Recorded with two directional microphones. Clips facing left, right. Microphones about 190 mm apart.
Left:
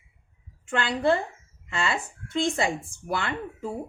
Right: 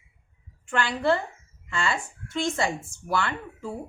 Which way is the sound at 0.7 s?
20° left (ahead or behind).